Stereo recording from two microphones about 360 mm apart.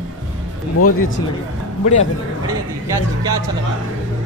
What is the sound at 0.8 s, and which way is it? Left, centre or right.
Speech, left.